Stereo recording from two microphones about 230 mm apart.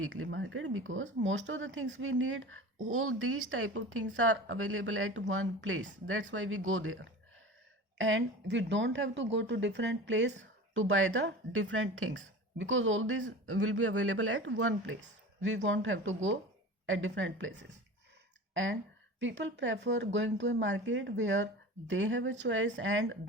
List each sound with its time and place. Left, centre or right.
0.0 s a woman's voice: right